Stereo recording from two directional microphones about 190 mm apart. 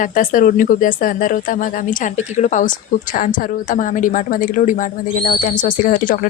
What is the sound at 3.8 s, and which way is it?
Speech, 45° left (ahead or behind).